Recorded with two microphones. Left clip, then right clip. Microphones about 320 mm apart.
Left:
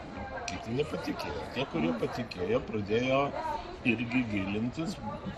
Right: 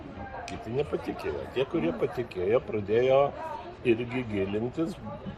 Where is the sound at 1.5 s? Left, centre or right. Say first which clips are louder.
Right 4 dB; centre.